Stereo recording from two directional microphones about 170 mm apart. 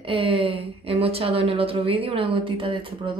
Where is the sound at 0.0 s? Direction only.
30° right (ahead or behind).